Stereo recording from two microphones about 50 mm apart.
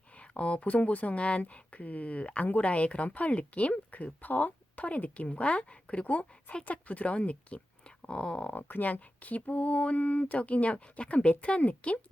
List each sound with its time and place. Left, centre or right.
0.2 s speech: left
8.5 s speech: left